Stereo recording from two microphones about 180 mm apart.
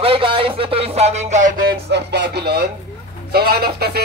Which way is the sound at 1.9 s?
70° right (ahead or behind).